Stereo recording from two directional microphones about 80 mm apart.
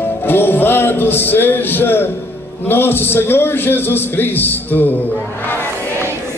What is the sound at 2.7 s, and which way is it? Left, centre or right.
A man's voice, left.